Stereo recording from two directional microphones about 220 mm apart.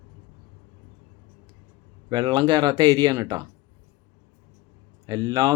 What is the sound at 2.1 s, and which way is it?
Speech, 20° right (ahead or behind).